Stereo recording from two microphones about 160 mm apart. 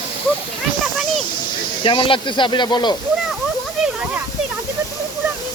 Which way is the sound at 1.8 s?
35° left (ahead or behind).